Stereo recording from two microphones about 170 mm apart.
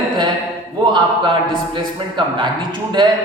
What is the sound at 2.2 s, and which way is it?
Speech, 25° right (ahead or behind).